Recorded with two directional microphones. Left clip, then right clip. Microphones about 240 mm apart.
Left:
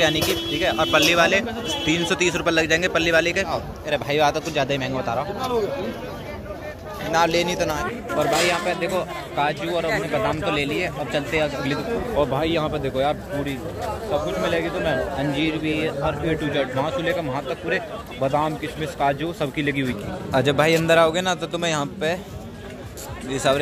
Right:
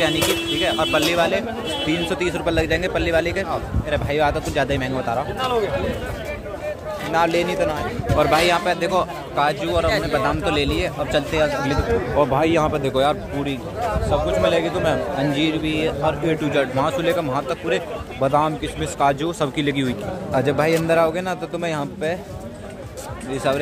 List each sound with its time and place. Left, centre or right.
0.0 s a man's voice: centre
7.1 s a man's voice: centre
8.2 s a man's voice: centre
20.3 s a man's voice: centre
23.3 s a man's voice: centre